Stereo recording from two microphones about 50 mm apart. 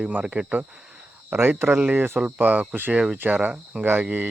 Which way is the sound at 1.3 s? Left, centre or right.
Right.